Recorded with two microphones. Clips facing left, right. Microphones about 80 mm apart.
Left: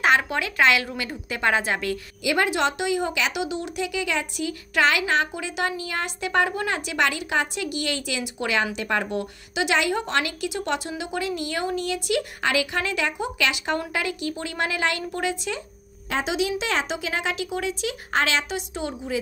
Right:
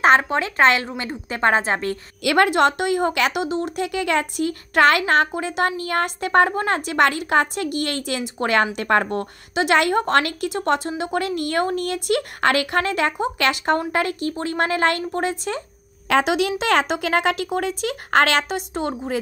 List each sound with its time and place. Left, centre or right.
0.0 s a woman's voice: right
2.2 s speech: right
16.1 s speech: right